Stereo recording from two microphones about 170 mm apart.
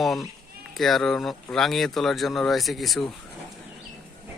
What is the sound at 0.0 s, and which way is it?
Speech, centre (ahead or behind).